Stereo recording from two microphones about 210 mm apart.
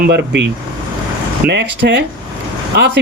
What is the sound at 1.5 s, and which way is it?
Speech, 55° right (ahead or behind).